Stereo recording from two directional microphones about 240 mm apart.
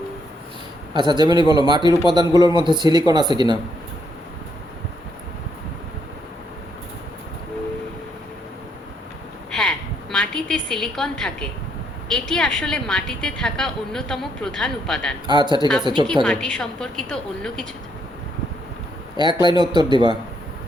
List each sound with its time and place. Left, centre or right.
0.9 s a man's voice: centre
9.5 s a sound: centre
12.0 s a woman's voice: centre
15.3 s a man's voice: centre
16.2 s a woman's voice: centre
19.3 s a man's voice: centre
19.5 s a man's voice: centre